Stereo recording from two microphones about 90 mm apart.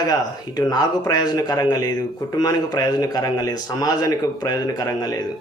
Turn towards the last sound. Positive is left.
turn(degrees=45)  # may be behind; listen again after turning